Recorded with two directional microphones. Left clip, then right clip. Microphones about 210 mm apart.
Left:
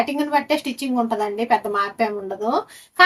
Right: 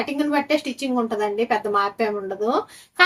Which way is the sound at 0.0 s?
15° left (ahead or behind).